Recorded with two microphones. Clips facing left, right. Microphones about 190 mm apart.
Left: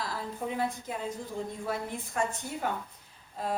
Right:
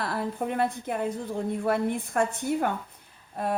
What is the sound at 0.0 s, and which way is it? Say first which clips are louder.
A woman's voice: right 6 dB; 60° right (ahead or behind).